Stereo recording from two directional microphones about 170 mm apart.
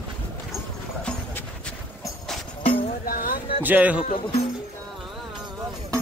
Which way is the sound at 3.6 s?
10° right (ahead or behind).